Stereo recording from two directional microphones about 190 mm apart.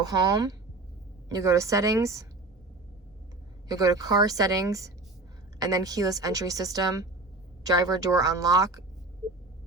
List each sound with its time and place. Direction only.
0.0 s a woman's voice: 20° right (ahead or behind)
3.7 s a woman's voice: 20° right (ahead or behind)